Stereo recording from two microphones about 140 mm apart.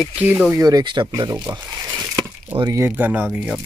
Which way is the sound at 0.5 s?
25° right (ahead or behind).